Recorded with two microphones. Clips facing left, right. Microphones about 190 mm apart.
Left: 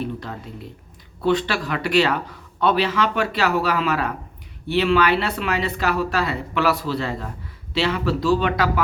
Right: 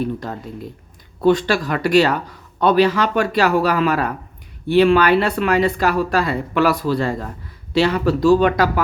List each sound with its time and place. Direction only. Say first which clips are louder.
0.0 s speech: right 5 dB; 45° right (ahead or behind)